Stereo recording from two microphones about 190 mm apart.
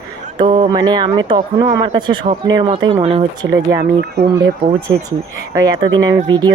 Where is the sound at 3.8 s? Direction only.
60° right (ahead or behind).